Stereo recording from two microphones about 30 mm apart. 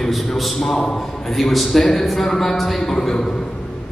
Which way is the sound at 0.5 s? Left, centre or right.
Centre.